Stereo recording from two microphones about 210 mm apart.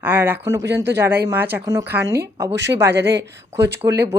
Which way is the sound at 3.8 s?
15° right (ahead or behind).